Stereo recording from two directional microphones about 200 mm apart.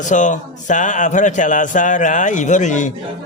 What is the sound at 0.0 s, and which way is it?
A man's voice, 40° left (ahead or behind).